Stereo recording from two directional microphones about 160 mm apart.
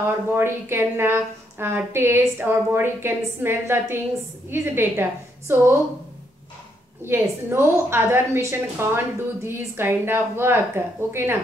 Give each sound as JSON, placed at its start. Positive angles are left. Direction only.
{"t": 0.0, "sound": "a woman's voice", "side_deg": -15}
{"t": 7.1, "sound": "a woman's voice", "side_deg": -15}